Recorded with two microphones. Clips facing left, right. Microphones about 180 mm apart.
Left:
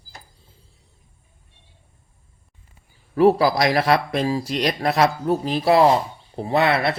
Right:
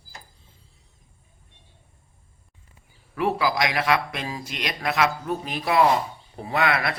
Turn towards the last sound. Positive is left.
turn(degrees=30)  # may be behind; listen again after turning